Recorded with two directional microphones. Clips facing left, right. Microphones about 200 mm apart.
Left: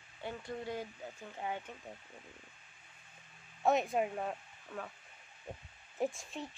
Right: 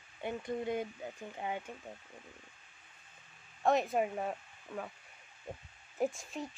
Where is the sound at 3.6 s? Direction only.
Centre (ahead or behind).